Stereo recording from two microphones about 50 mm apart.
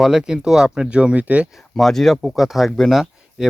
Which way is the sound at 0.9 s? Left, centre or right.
Right.